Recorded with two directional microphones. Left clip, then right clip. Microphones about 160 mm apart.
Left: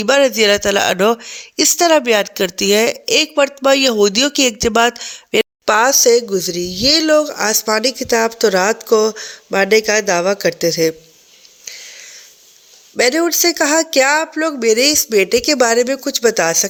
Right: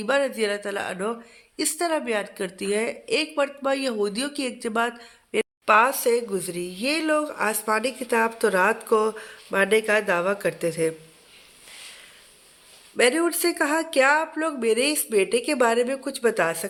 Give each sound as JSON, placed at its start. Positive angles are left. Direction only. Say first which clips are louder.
{"t": 0.0, "sound": "speech", "louder": "left 11 dB", "side_deg": 50}
{"t": 13.0, "sound": "speech", "louder": "left 7 dB", "side_deg": 40}